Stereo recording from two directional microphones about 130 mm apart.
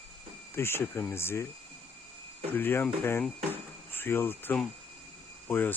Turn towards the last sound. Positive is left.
turn(degrees=15)  # may be behind; listen again after turning